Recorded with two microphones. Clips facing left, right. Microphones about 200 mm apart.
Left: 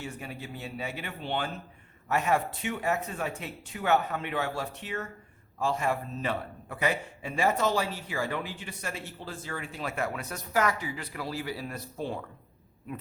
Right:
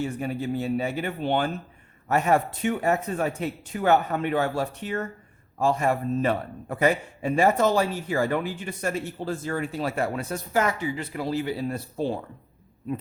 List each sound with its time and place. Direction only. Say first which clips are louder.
0.2 s a man's voice: right 12 dB; 45° right (ahead or behind)